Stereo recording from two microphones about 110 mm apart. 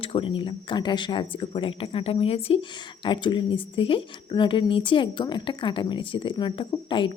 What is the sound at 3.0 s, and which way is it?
Speech, 45° left (ahead or behind).